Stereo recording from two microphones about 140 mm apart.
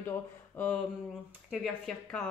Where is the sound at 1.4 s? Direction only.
Centre (ahead or behind).